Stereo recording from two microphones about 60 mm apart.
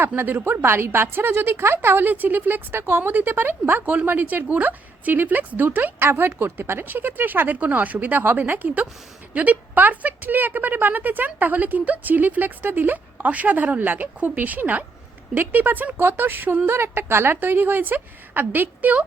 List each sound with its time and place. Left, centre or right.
0.2 s a woman's voice: right
16.6 s a woman's voice: right